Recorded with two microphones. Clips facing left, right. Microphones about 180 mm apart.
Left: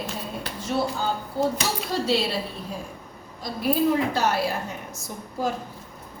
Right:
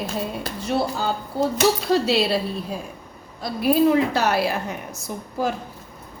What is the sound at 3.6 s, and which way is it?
A woman's voice, 70° right (ahead or behind).